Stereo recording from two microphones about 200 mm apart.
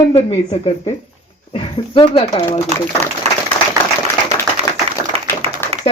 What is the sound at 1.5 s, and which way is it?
Speech, 30° left (ahead or behind).